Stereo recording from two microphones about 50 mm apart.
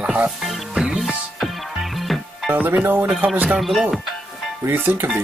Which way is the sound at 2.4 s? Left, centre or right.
Right.